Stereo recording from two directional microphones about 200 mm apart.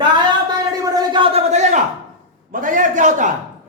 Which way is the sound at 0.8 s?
20° right (ahead or behind).